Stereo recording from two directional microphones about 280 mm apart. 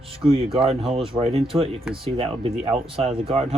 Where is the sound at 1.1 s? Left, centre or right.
Right.